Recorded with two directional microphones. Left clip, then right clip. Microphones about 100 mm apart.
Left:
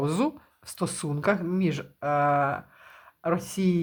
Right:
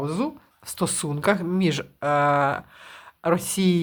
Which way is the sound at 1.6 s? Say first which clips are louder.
Right 5 dB; 35° right (ahead or behind).